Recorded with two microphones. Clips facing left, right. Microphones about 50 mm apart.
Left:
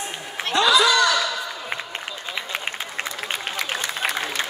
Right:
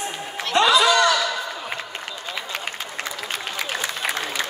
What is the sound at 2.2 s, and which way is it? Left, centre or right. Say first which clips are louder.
Run: left 1 dB; centre.